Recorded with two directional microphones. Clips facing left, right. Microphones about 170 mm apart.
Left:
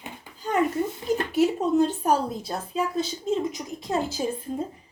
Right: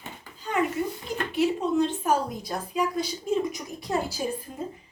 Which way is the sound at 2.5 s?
25° left (ahead or behind).